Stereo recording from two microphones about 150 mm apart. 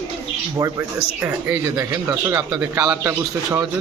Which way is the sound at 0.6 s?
25° right (ahead or behind).